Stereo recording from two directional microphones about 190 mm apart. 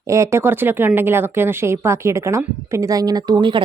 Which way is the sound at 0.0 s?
15° right (ahead or behind).